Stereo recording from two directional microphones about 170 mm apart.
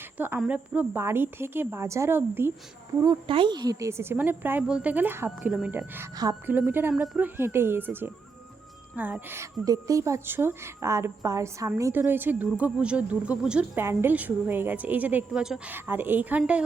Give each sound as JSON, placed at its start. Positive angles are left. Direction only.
{"t": 0.2, "sound": "speech", "side_deg": -10}
{"t": 3.2, "sound": "speech", "side_deg": -30}